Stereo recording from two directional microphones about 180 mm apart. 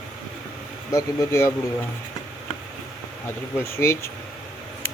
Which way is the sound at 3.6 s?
15° left (ahead or behind).